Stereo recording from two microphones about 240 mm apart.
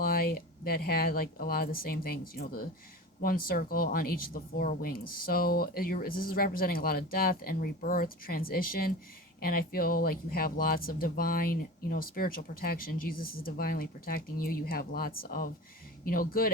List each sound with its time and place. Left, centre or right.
0.0 s speech: left